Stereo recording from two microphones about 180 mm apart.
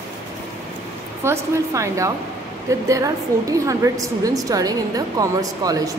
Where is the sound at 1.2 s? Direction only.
15° right (ahead or behind).